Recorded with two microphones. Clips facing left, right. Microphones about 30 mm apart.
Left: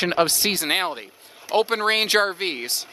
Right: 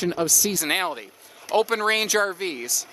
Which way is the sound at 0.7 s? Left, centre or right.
Left.